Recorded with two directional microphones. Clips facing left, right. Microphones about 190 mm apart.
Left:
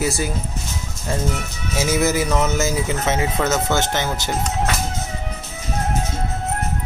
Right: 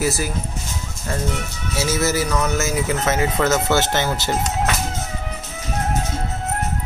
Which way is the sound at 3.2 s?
Centre (ahead or behind).